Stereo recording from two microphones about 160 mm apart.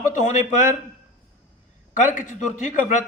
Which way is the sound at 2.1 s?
50° left (ahead or behind).